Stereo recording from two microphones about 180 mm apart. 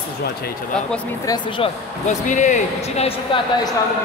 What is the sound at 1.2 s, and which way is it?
Speech, 25° left (ahead or behind).